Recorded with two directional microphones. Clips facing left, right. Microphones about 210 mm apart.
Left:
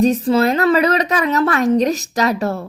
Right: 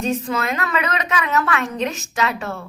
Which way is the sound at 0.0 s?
35° left (ahead or behind).